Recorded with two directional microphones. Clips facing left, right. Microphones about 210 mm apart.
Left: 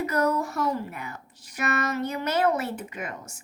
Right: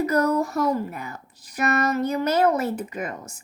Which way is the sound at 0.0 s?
40° right (ahead or behind).